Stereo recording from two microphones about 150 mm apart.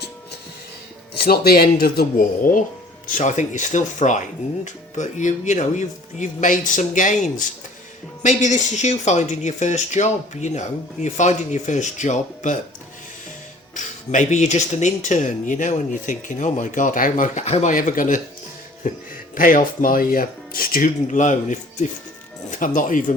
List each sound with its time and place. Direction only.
1.1 s speech: 90° left; by 2.6 s 65° left (ahead or behind)
3.2 s speech: 55° left (ahead or behind)
13.7 s speech: 55° left (ahead or behind)
17.4 s speech: 50° left (ahead or behind)